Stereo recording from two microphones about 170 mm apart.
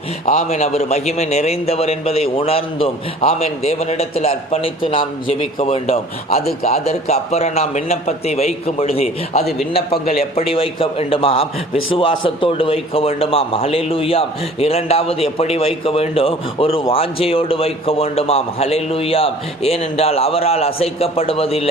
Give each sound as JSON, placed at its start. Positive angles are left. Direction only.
{"t": 0.3, "sound": "a man's voice", "side_deg": 40}